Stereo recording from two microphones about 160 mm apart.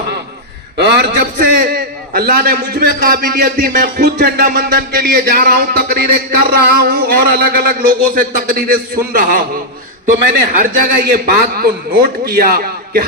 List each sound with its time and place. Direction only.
0.8 s a man's voice: 90° right; by 9.4 s 60° right (ahead or behind)
10.6 s a man's voice: 65° right (ahead or behind)